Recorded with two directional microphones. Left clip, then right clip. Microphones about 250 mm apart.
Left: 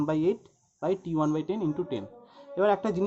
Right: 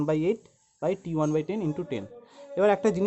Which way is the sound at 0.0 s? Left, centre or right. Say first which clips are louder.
Right 1 dB; right.